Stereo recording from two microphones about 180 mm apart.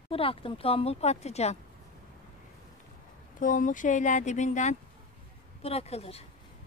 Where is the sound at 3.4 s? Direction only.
45° left (ahead or behind).